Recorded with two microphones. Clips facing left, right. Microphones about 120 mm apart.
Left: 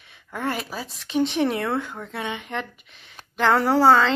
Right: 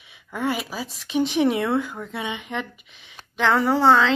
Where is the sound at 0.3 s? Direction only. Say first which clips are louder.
Right 2 dB; centre (ahead or behind).